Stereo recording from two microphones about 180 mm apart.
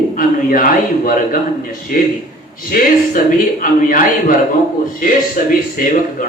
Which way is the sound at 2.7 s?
50° left (ahead or behind).